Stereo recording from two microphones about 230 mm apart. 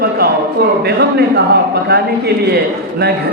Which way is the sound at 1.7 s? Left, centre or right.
Right.